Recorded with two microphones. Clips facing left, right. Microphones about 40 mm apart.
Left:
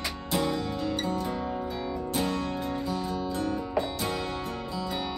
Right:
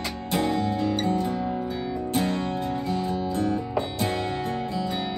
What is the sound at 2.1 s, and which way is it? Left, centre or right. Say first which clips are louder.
Music: right 4 dB; right.